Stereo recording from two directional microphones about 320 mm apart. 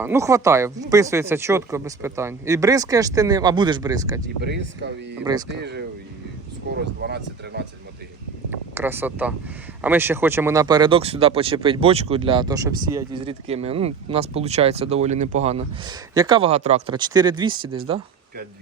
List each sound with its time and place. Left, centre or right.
0.0 s speech: centre
4.4 s speech: right
5.2 s speech: centre
5.5 s speech: right
8.4 s speech: centre